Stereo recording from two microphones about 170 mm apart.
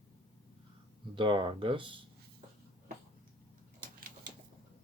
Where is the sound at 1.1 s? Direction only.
30° right (ahead or behind).